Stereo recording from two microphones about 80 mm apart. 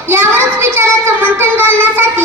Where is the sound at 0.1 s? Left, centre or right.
Right.